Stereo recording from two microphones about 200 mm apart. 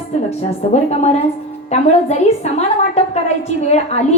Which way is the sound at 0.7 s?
35° left (ahead or behind).